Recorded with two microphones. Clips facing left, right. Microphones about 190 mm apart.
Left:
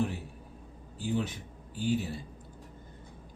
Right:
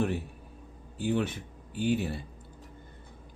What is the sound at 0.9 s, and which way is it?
Speech, 60° right (ahead or behind).